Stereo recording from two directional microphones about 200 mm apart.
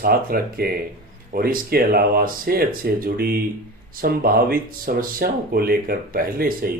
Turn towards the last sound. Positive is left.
turn(degrees=-45)  # may be behind; listen again after turning